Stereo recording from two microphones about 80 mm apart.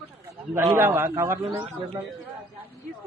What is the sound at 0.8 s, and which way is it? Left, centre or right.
Speech, right.